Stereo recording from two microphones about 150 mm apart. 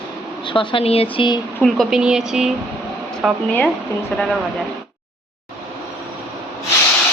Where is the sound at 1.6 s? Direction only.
Centre (ahead or behind).